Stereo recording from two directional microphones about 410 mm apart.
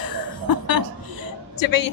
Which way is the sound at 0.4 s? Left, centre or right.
Left.